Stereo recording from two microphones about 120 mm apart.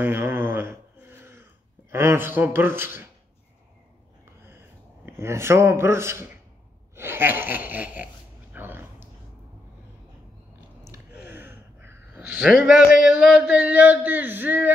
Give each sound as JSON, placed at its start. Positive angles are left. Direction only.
{"t": 0.0, "sound": "speech", "side_deg": -20}
{"t": 5.0, "sound": "speech", "side_deg": -20}
{"t": 7.0, "sound": "laughter", "side_deg": -20}
{"t": 8.5, "sound": "a sound", "side_deg": -15}
{"t": 10.9, "sound": "a sound", "side_deg": -20}
{"t": 12.4, "sound": "a man's voice", "side_deg": -5}
{"t": 13.0, "sound": "male singing", "side_deg": -5}